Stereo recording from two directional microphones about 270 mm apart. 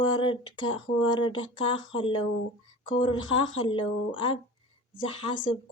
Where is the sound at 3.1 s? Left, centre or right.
Centre.